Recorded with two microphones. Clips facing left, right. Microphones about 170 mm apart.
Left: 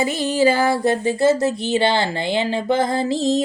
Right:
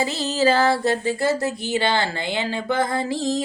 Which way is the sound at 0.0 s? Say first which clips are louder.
Left 3 dB; 15° left (ahead or behind).